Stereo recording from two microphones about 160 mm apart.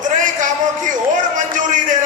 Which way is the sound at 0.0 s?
55° right (ahead or behind).